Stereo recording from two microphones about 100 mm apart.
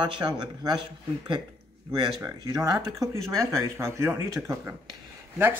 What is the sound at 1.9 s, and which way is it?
Speech, 40° right (ahead or behind).